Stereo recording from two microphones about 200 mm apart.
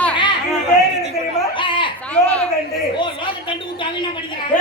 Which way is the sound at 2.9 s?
25° left (ahead or behind).